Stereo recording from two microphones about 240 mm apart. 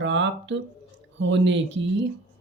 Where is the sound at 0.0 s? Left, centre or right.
Right.